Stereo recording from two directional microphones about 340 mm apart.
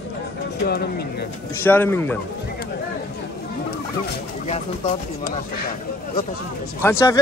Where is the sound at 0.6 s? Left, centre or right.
Left.